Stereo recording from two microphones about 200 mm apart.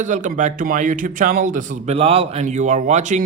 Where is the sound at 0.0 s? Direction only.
40° right (ahead or behind).